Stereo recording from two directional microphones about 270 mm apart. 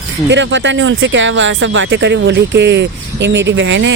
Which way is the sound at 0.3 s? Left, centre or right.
Right.